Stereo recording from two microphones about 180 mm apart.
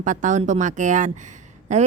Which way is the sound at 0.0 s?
45° right (ahead or behind).